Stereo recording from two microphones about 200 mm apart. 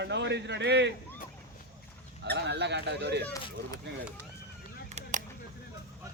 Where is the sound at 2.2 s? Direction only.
60° right (ahead or behind).